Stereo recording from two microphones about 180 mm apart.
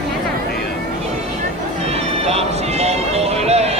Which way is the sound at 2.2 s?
35° right (ahead or behind).